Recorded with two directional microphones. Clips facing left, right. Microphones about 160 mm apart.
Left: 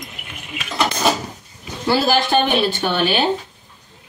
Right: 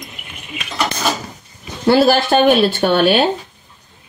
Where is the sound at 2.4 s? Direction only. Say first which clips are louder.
Right 6 dB; 55° right (ahead or behind).